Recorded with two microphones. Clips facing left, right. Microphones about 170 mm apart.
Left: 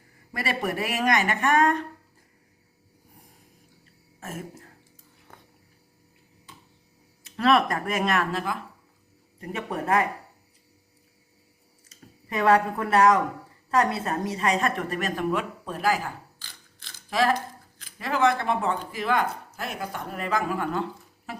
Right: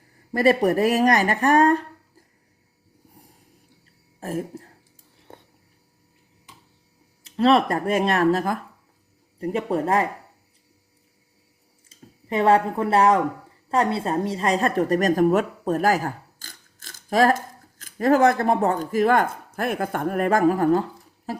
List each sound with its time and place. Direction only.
0.3 s speech: 40° right (ahead or behind)
4.2 s speech: 35° right (ahead or behind)
5.3 s a sound: 30° right (ahead or behind)
7.3 s speech: 30° right (ahead or behind)
11.9 s speech: 30° right (ahead or behind)
21.3 s music: 35° right (ahead or behind)